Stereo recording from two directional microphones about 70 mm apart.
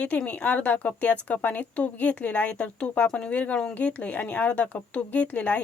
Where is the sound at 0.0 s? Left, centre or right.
Centre.